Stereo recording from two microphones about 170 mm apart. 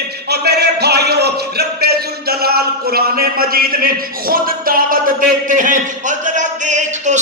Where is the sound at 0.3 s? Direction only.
75° right (ahead or behind).